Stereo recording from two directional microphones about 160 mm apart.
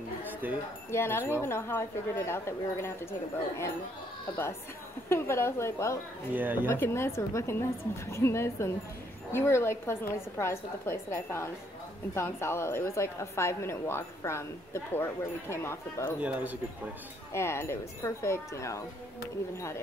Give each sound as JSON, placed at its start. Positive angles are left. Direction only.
{"t": 0.4, "sound": "speech", "side_deg": -10}
{"t": 0.9, "sound": "a woman's voice", "side_deg": 15}
{"t": 5.1, "sound": "a woman's voice", "side_deg": 15}
{"t": 6.3, "sound": "speech", "side_deg": -10}
{"t": 6.7, "sound": "a woman's voice", "side_deg": 15}
{"t": 16.2, "sound": "speech", "side_deg": -10}
{"t": 17.3, "sound": "a woman's voice", "side_deg": 15}